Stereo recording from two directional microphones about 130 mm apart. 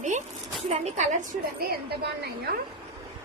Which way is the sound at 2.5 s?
90° right.